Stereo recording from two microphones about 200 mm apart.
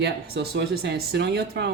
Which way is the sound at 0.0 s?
55° right (ahead or behind).